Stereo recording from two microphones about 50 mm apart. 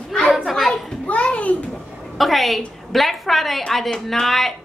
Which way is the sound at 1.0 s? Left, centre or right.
Left.